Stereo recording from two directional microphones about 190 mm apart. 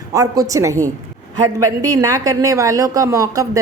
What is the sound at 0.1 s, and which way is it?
A woman's voice, 15° right (ahead or behind).